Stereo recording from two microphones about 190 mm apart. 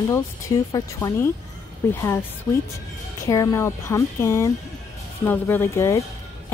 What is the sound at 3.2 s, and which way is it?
A woman's voice, 15° left (ahead or behind).